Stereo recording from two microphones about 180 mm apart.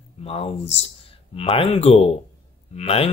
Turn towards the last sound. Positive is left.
turn(degrees=35)  # may be behind; listen again after turning